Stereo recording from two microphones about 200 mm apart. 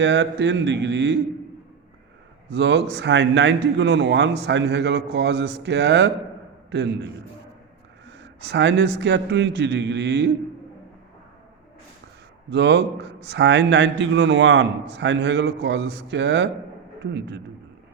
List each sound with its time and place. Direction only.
0.0 s a man's voice: 60° right (ahead or behind)
2.5 s a man's voice: 60° right (ahead or behind)
8.2 s a man's voice: 60° right (ahead or behind)
12.5 s a man's voice: 60° right (ahead or behind)